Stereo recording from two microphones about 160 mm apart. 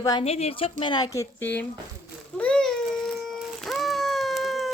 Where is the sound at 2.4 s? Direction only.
5° left (ahead or behind).